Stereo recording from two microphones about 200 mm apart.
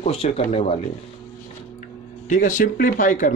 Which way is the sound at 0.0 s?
30° left (ahead or behind).